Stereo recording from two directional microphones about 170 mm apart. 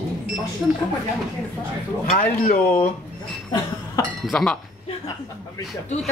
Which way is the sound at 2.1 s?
55° left (ahead or behind).